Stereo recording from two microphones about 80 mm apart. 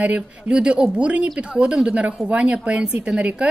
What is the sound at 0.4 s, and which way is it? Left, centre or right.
Speech, centre.